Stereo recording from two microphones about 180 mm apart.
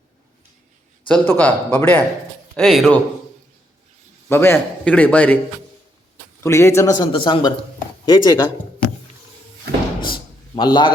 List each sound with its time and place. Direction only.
1.0 s a man's voice: 10° left (ahead or behind)
2.6 s speech: centre (ahead or behind)
4.3 s a man's voice: 15° left (ahead or behind)
6.4 s a man's voice: 15° left (ahead or behind)
10.1 s a sound: 25° left (ahead or behind)